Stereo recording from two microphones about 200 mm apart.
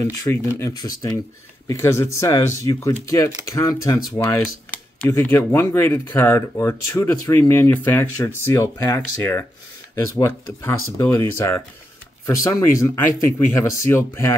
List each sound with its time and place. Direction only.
0.0 s speech: 15° left (ahead or behind)